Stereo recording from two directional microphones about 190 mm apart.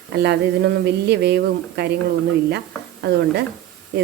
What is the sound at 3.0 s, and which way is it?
Speech, 60° right (ahead or behind).